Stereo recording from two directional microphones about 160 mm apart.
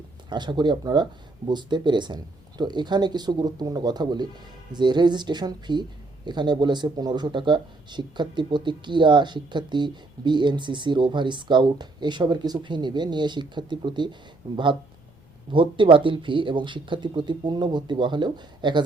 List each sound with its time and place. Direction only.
0.3 s speech: 30° right (ahead or behind)